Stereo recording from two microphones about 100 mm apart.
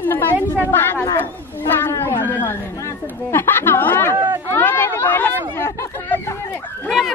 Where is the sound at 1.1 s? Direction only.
20° left (ahead or behind).